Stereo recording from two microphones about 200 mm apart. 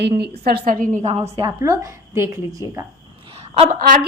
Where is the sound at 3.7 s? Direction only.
40° right (ahead or behind).